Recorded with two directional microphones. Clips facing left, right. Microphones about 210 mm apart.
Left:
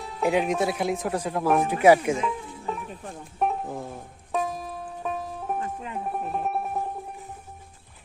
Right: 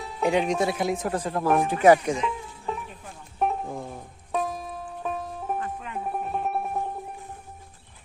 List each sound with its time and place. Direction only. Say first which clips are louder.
0.0 s speech: even; centre (ahead or behind)
2.7 s music: even; centre (ahead or behind)
5.5 s music: left 1 dB; 25° left (ahead or behind)
6.1 s music: even; centre (ahead or behind)